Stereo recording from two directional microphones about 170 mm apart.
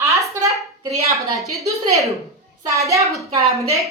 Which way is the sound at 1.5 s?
20° right (ahead or behind).